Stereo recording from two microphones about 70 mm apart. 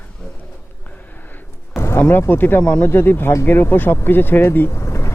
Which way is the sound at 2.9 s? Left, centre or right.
Left.